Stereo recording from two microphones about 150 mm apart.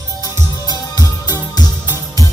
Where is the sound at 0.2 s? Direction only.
25° left (ahead or behind).